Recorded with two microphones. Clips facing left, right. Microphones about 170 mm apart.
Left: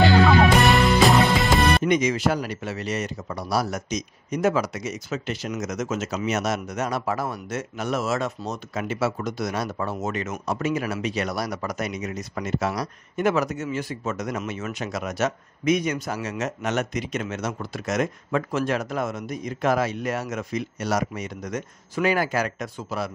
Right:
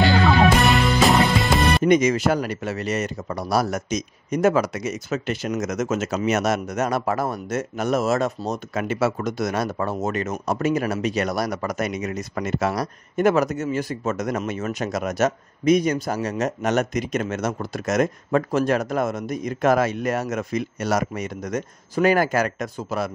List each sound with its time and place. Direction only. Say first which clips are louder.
0.0 s music: even; centre (ahead or behind)
1.9 s speech: right 4 dB; 45° right (ahead or behind)
8.7 s speech: right 3 dB; 55° right (ahead or behind)